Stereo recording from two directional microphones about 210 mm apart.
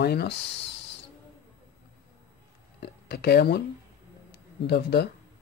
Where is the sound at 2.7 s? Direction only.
55° left (ahead or behind).